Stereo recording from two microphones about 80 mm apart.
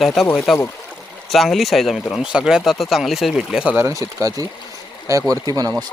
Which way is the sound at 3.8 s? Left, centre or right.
Right.